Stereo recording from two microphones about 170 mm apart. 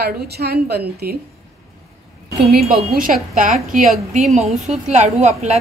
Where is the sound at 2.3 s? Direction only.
Centre (ahead or behind).